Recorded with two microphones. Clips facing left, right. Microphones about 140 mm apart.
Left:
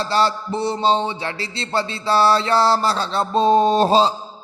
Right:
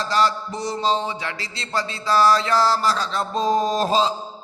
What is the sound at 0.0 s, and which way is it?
Mantra, 30° left (ahead or behind).